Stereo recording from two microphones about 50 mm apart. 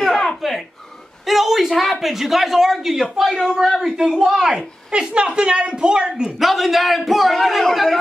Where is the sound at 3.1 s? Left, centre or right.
Centre.